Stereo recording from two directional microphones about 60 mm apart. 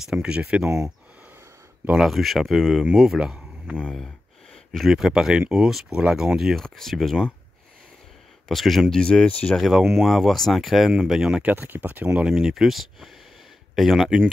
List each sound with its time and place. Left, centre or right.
0.0 s speech: centre
2.0 s speech: centre
3.2 s a sound: centre
4.7 s speech: centre
8.5 s speech: centre
9.6 s speech: centre
11.5 s speech: right
12.3 s speech: centre